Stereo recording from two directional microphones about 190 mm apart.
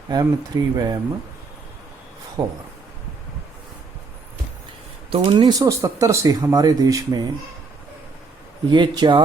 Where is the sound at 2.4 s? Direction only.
20° right (ahead or behind).